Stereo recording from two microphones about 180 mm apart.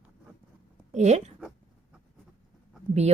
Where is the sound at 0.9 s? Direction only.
40° right (ahead or behind).